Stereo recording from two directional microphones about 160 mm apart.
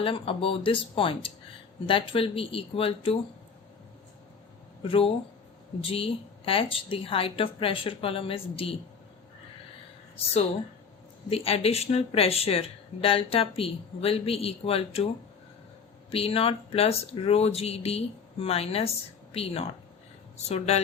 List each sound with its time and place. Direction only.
0.0 s speech: 35° left (ahead or behind)
4.8 s speech: 35° left (ahead or behind)
11.3 s speech: 40° left (ahead or behind)
16.1 s speech: 35° left (ahead or behind)